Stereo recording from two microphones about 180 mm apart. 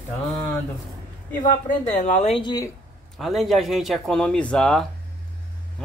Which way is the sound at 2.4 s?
25° left (ahead or behind).